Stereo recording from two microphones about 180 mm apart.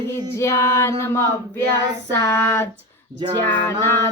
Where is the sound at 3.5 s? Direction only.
15° left (ahead or behind).